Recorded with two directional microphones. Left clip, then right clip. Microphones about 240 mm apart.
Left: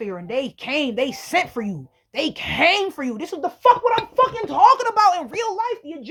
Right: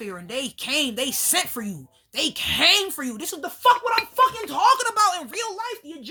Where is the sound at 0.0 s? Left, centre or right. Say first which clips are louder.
Left 5 dB; right.